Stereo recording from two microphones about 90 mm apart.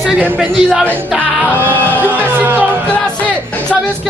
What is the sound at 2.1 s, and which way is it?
Speech, 20° right (ahead or behind).